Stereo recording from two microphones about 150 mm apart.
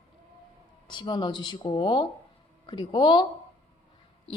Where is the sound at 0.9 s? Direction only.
30° left (ahead or behind).